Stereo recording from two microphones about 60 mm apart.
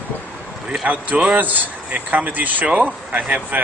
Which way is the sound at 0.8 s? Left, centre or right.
Right.